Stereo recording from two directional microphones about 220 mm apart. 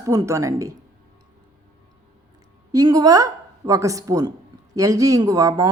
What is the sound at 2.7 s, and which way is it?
A woman's voice, 15° right (ahead or behind).